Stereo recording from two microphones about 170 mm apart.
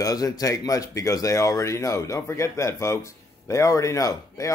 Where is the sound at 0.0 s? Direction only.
20° left (ahead or behind).